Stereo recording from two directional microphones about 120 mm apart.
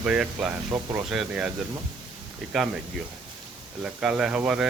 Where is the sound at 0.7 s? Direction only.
20° right (ahead or behind).